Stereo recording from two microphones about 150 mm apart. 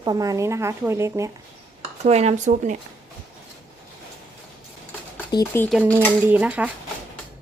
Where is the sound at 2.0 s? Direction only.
45° right (ahead or behind).